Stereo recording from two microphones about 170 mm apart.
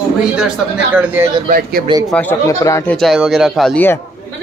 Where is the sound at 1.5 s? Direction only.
60° right (ahead or behind).